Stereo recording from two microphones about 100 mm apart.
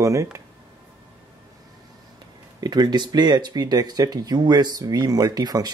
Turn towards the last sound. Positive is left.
turn(degrees=-40)  # may be behind; listen again after turning